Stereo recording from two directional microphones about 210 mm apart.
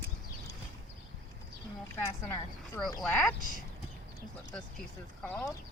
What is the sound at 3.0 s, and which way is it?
Speech, 5° left (ahead or behind).